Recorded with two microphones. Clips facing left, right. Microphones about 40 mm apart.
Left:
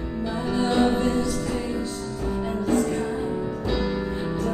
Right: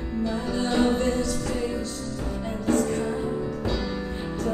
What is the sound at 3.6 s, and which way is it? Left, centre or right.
Music, centre.